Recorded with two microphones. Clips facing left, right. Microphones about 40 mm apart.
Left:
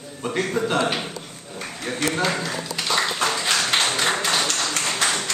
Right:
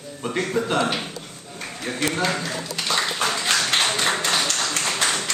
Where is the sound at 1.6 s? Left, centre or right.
Centre.